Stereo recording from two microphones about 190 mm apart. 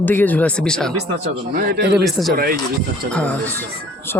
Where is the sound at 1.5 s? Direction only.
50° right (ahead or behind).